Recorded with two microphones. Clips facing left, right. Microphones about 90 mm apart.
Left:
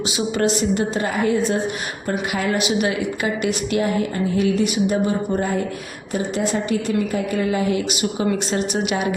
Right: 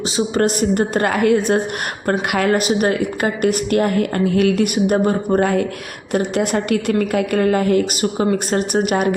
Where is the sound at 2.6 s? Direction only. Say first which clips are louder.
Right 3 dB; 45° right (ahead or behind).